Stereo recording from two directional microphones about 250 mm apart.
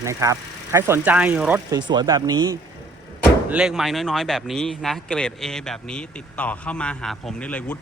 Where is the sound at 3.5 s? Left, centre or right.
Centre.